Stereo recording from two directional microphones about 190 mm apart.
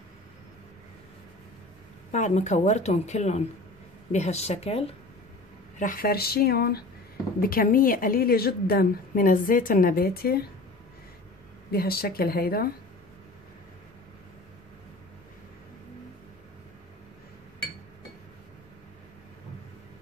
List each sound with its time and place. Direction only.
2.1 s speech: 40° left (ahead or behind)
5.8 s a woman's voice: 50° left (ahead or behind)
11.7 s a woman's voice: 55° left (ahead or behind)